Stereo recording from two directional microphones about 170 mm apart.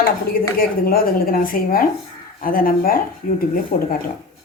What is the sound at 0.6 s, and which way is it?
Speech, 60° left (ahead or behind).